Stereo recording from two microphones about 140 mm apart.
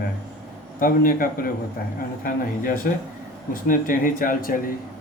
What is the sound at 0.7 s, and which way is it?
Speech, 85° left.